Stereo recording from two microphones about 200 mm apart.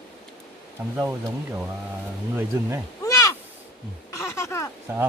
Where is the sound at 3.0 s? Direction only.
15° left (ahead or behind).